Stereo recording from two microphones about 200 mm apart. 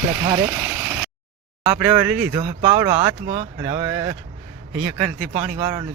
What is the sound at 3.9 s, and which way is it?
Speech, 15° right (ahead or behind).